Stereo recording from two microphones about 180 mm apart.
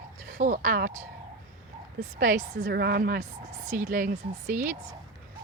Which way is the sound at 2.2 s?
50° right (ahead or behind).